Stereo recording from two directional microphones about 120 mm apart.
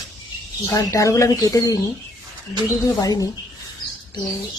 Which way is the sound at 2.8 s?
30° left (ahead or behind).